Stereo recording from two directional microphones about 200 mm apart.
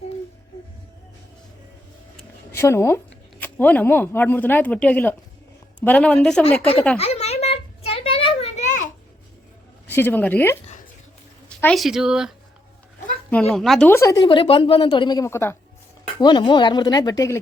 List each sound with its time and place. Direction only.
2.5 s a woman's voice: 15° left (ahead or behind)
7.0 s a sound: 30° left (ahead or behind)
9.9 s speech: 10° left (ahead or behind)
13.5 s speech: centre (ahead or behind)
16.2 s speech: 25° left (ahead or behind)